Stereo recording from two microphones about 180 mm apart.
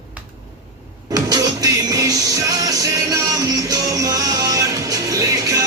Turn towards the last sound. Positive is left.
turn(degrees=-20)  # may be behind; listen again after turning